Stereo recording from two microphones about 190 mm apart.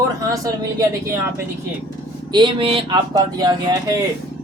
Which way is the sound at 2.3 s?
25° right (ahead or behind).